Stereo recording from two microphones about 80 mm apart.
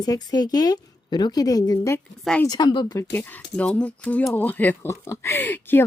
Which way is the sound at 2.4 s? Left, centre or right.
Left.